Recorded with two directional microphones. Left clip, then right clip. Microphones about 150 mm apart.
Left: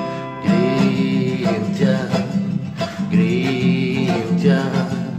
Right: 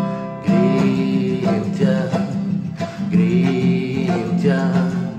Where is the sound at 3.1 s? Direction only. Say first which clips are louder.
Right 1 dB; 20° right (ahead or behind).